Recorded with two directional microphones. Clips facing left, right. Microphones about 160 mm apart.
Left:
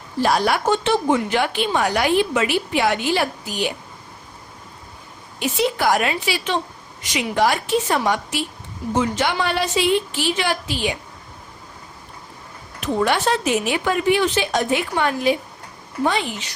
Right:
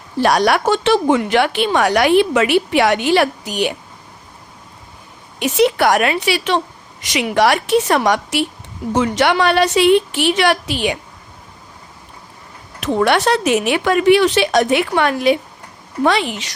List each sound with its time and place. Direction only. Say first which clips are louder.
0.2 s speech: right 4 dB; 70° right (ahead or behind)
5.4 s speech: right 6 dB; 70° right (ahead or behind)
12.8 s speech: right 4 dB; 75° right (ahead or behind)
16.0 s speech: right 5 dB; 85° right